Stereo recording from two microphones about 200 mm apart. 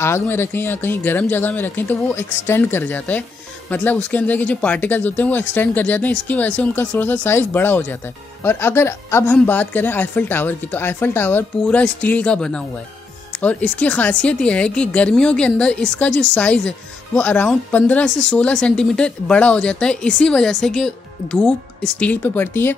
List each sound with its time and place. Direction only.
0.0 s a woman's voice: 10° left (ahead or behind)